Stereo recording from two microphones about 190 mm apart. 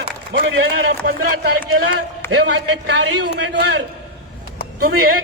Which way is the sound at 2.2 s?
65° right (ahead or behind).